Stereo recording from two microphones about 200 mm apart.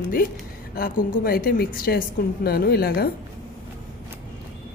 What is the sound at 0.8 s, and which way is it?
A woman's voice, 45° left (ahead or behind).